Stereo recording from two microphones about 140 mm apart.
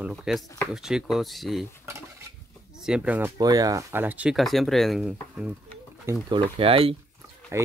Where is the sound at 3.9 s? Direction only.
15° right (ahead or behind).